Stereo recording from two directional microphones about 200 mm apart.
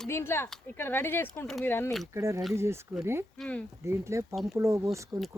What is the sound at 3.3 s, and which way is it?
Speech, 5° left (ahead or behind).